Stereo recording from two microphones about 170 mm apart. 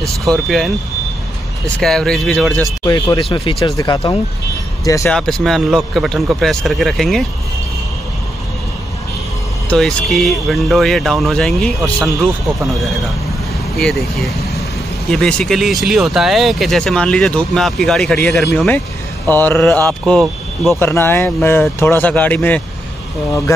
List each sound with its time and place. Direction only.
0.2 s speech: centre (ahead or behind)
1.8 s speech: 5° left (ahead or behind)
2.8 s speech: 25° left (ahead or behind)
5.1 s speech: 5° left (ahead or behind)
9.7 s speech: centre (ahead or behind)